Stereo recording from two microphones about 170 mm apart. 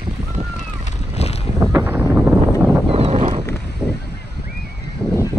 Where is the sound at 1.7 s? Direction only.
10° right (ahead or behind).